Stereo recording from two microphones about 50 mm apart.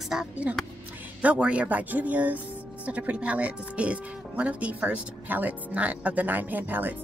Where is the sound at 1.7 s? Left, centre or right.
Right.